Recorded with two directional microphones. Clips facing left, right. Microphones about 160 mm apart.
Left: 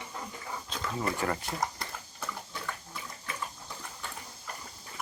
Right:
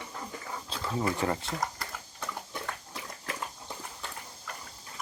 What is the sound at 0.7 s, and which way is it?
Speech, 30° right (ahead or behind).